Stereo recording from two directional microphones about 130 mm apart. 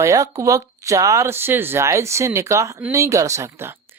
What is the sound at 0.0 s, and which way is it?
A woman's voice, 25° right (ahead or behind).